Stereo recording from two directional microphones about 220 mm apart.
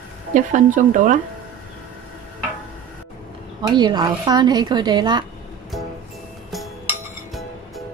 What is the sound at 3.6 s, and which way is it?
Speech, 20° right (ahead or behind).